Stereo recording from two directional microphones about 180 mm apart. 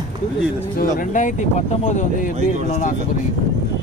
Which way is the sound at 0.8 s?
45° left (ahead or behind).